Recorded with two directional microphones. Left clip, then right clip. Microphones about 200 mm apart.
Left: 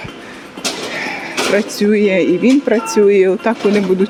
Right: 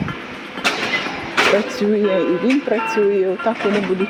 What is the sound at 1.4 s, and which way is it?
Speech, 45° left (ahead or behind).